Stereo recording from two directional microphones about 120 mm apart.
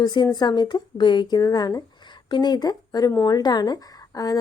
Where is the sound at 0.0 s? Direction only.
35° left (ahead or behind).